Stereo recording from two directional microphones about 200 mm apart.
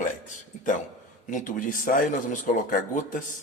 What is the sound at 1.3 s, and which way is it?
A man's voice, 40° left (ahead or behind).